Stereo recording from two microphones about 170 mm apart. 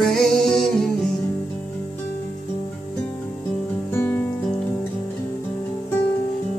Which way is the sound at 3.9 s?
10° left (ahead or behind).